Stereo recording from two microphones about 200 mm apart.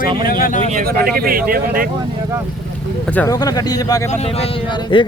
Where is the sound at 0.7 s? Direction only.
45° right (ahead or behind).